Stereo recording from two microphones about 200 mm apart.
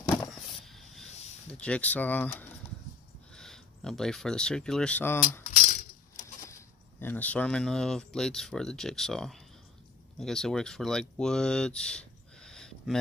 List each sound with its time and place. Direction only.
0.0 s a sound: 10° left (ahead or behind)
1.5 s speech: 5° left (ahead or behind)
5.4 s coin: 40° left (ahead or behind)
6.5 s speech: 10° left (ahead or behind)